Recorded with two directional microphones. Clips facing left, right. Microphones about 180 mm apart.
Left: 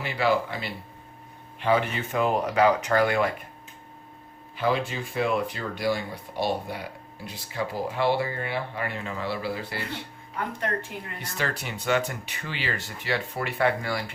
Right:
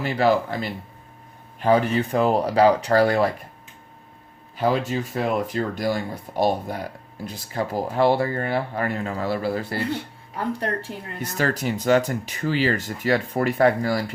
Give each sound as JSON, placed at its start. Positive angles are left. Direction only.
{"t": 0.0, "sound": "speech", "side_deg": -45}
{"t": 4.5, "sound": "speech", "side_deg": -40}